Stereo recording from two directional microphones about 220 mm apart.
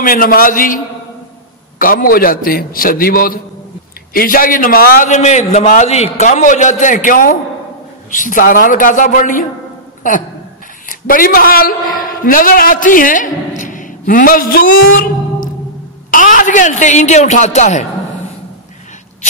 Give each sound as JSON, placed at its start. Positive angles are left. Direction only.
{"t": 0.0, "sound": "a man's voice", "side_deg": 40}
{"t": 1.8, "sound": "a man's voice", "side_deg": 40}
{"t": 10.9, "sound": "a woman's voice", "side_deg": 40}
{"t": 13.6, "sound": "a sound", "side_deg": 35}
{"t": 16.1, "sound": "a man's voice", "side_deg": 35}